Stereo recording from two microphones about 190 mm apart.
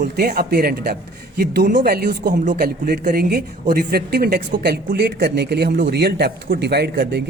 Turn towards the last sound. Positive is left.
turn(degrees=-60)  # may be behind; listen again after turning